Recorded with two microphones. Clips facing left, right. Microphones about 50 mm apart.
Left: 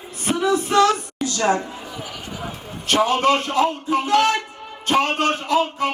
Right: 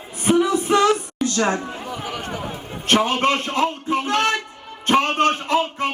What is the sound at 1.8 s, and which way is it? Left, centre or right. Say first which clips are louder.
Chatter: right 4 dB; right.